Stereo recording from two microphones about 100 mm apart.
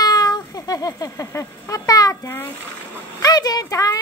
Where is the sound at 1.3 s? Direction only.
35° left (ahead or behind).